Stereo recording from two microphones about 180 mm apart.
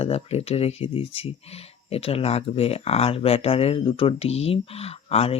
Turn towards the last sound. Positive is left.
turn(degrees=35)  # may be behind; listen again after turning